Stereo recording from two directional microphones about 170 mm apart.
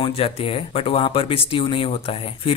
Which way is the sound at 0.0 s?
35° left (ahead or behind).